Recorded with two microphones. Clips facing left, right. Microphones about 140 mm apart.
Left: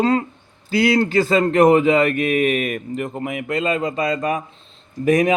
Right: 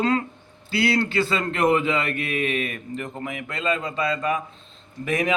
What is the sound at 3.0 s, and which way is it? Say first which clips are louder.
A man's voice: left 6 dB; 35° left (ahead or behind).